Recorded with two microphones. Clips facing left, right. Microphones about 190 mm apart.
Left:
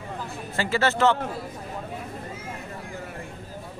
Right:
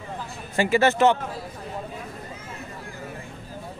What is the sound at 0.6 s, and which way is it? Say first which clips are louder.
Speech: right 4 dB; 15° right (ahead or behind).